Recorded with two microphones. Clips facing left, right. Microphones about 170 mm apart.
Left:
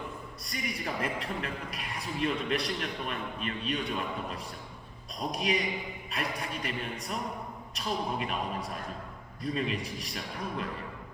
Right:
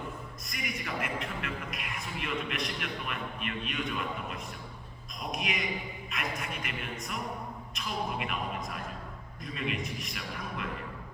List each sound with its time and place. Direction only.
0.4 s a man's voice: 35° left (ahead or behind)